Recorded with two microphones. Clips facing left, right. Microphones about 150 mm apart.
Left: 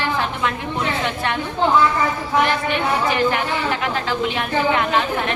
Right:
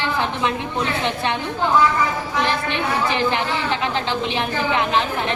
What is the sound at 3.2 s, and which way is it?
Speech, 25° right (ahead or behind).